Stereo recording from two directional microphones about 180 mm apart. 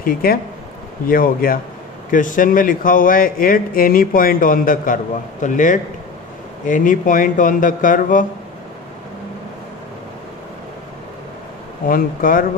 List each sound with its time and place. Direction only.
0.0 s speech: 55° left (ahead or behind)
11.9 s speech: 50° left (ahead or behind)